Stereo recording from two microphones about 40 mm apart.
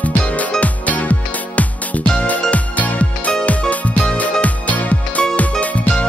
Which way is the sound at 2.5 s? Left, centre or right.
Left.